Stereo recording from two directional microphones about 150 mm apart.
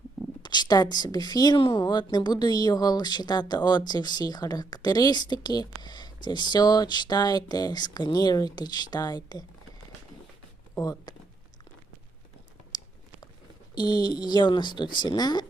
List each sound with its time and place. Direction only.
0.4 s speech: 30° left (ahead or behind)
10.8 s speech: 25° left (ahead or behind)
12.7 s chewing: 25° left (ahead or behind)
13.7 s speech: 30° left (ahead or behind)